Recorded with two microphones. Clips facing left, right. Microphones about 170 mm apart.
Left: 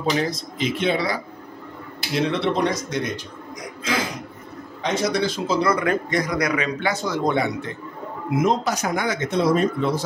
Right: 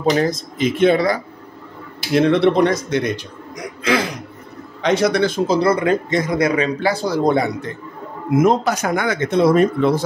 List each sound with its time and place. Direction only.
0.1 s speech: 50° right (ahead or behind)
2.1 s speech: 55° right (ahead or behind)
3.8 s throat clearing: 70° right (ahead or behind)
4.8 s speech: 70° right (ahead or behind)
5.5 s speech: 30° right (ahead or behind)
8.4 s speech: 55° right (ahead or behind)